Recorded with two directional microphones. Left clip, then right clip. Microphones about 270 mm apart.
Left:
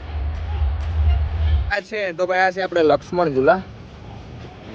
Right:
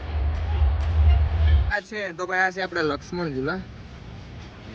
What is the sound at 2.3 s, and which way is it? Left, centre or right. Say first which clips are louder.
Speech: left 4 dB; centre.